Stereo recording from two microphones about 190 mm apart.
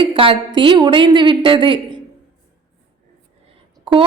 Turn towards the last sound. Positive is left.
turn(degrees=-25)  # may be behind; listen again after turning